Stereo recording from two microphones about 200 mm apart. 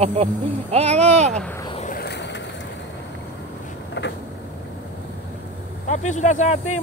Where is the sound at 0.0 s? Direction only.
30° right (ahead or behind).